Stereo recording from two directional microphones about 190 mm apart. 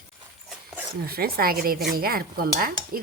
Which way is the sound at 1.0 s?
50° right (ahead or behind).